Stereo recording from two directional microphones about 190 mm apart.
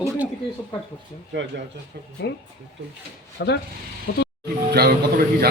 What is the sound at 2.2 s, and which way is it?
Speech, 65° left (ahead or behind).